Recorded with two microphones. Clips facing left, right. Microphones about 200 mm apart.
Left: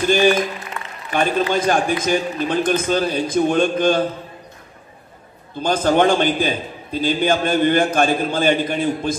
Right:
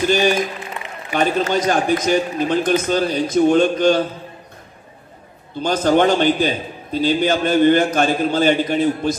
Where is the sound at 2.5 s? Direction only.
50° left (ahead or behind).